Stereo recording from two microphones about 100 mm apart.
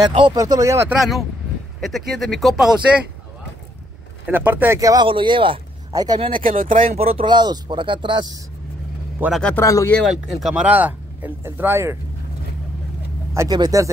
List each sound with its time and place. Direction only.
0.0 s speech: 40° right (ahead or behind)
0.9 s speech: centre (ahead or behind)
4.3 s speech: 20° right (ahead or behind)
4.7 s speech: 35° right (ahead or behind)
5.0 s speech: 55° right (ahead or behind)
5.9 s speech: 40° right (ahead or behind)
6.2 s speech: 70° right (ahead or behind)
7.2 s speech: 45° right (ahead or behind)
9.2 s speech: 15° right (ahead or behind)
9.6 s speech: 35° left (ahead or behind)
10.0 s speech: 5° right (ahead or behind); by 12.0 s 25° right (ahead or behind)
13.5 s speech: 40° right (ahead or behind)